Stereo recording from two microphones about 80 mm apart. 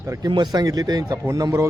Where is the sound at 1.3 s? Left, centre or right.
Right.